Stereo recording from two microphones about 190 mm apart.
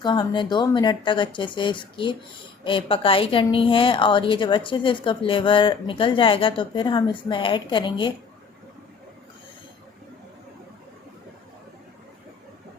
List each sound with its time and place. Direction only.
0.0 s speech: 25° left (ahead or behind)